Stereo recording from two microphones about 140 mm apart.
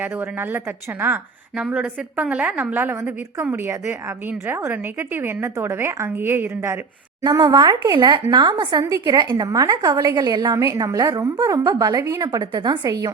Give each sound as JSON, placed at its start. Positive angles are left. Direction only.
{"t": 0.0, "sound": "a woman's voice", "side_deg": -15}
{"t": 7.2, "sound": "a woman's voice", "side_deg": -30}